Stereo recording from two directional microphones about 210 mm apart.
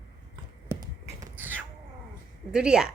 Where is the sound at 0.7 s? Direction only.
15° right (ahead or behind).